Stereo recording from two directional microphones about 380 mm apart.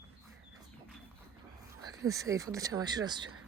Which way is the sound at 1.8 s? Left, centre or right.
Centre.